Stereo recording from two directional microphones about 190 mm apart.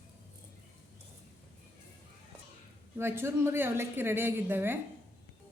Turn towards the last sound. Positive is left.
turn(degrees=-10)  # may be behind; listen again after turning